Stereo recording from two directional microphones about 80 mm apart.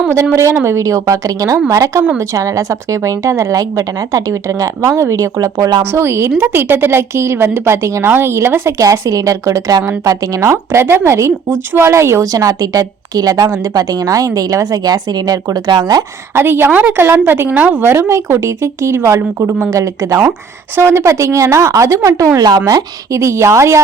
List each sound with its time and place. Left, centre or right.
0.5 s a woman's voice: right
5.8 s a woman's voice: right
8.8 s a woman's voice: right
12.3 s a woman's voice: right
16.3 s a woman's voice: right
18.1 s a woman's voice: right
19.7 s a woman's voice: right